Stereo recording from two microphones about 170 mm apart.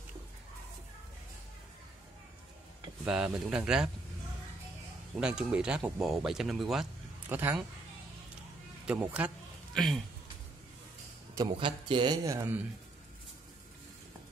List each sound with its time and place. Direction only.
3.1 s speech: 5° right (ahead or behind)
5.1 s speech: 5° right (ahead or behind)
8.8 s speech: 5° right (ahead or behind)
11.3 s a man's voice: 30° right (ahead or behind)